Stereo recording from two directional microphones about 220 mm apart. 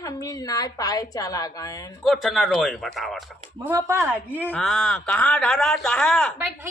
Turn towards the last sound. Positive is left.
turn(degrees=5)  # may be behind; listen again after turning